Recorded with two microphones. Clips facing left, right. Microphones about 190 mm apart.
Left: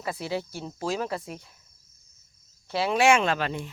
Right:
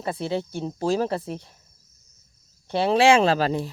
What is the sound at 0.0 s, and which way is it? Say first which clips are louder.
Speech: right 4 dB; 30° right (ahead or behind).